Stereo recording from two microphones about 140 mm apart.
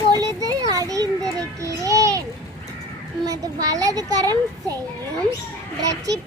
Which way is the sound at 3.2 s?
25° right (ahead or behind).